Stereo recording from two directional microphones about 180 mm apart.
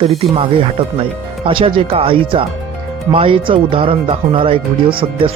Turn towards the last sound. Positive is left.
turn(degrees=-30)  # may be behind; listen again after turning